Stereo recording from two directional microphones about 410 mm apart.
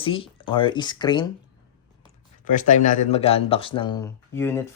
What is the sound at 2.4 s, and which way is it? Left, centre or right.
Speech, centre.